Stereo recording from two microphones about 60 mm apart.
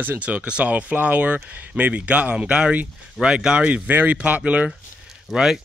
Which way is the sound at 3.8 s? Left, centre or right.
Right.